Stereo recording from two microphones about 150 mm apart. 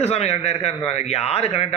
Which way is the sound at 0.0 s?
45° left (ahead or behind).